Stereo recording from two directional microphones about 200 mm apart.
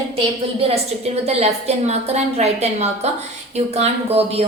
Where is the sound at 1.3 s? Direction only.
30° right (ahead or behind).